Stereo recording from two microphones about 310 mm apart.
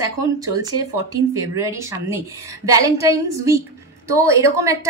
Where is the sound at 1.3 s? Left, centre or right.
Centre.